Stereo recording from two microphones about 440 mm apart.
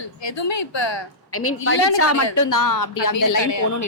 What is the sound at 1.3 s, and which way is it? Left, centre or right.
Speech, left.